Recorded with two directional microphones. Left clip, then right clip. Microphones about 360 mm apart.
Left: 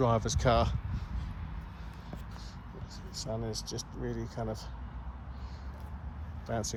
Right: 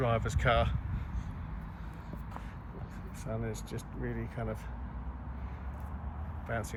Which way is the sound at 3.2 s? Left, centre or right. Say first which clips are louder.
Left 2 dB; left.